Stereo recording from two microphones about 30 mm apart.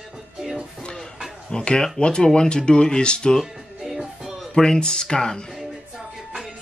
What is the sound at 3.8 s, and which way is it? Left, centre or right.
Music, centre.